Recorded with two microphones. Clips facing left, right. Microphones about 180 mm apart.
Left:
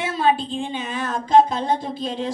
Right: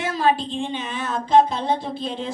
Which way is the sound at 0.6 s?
45° left (ahead or behind).